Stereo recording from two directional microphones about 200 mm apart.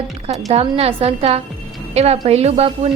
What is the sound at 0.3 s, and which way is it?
A woman's voice, 30° right (ahead or behind).